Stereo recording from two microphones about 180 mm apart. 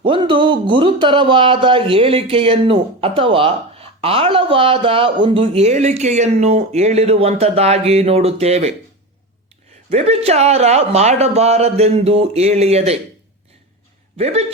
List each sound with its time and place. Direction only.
0.0 s speech: 30° right (ahead or behind)
9.9 s speech: 35° right (ahead or behind)